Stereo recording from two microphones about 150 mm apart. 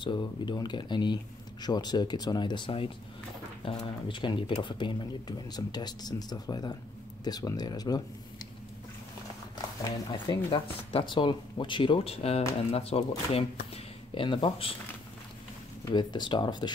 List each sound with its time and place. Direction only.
0.0 s speech: 30° left (ahead or behind)
9.8 s speech: 30° left (ahead or behind)
15.8 s speech: 30° left (ahead or behind)